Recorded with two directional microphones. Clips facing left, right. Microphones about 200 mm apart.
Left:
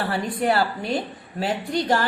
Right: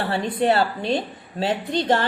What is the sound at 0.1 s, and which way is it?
A woman's voice, 25° right (ahead or behind).